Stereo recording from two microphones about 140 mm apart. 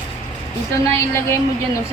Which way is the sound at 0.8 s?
20° left (ahead or behind).